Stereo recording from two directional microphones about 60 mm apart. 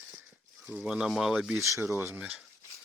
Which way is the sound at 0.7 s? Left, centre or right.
Centre.